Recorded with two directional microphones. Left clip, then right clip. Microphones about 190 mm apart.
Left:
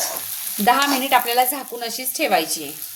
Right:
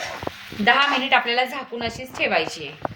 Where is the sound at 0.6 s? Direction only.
60° left (ahead or behind).